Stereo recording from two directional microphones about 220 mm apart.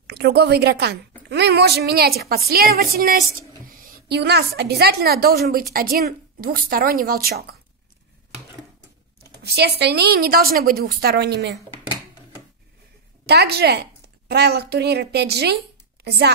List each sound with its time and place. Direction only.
0.0 s a woman's voice: 45° right (ahead or behind)
9.2 s a woman's voice: 45° right (ahead or behind)
13.3 s a woman's voice: 45° right (ahead or behind)